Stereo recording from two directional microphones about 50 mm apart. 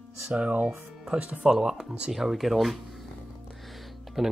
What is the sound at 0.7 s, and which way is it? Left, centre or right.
Speech, centre.